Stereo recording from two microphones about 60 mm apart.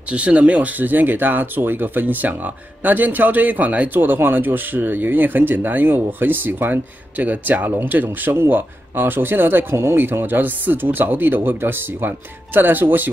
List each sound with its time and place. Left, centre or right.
0.1 s speech: right